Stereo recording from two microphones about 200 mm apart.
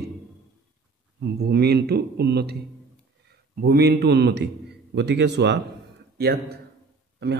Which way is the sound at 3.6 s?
55° right (ahead or behind).